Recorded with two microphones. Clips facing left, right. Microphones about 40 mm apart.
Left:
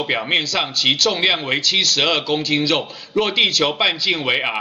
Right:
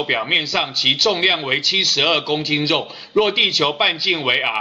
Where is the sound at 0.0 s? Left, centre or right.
Centre.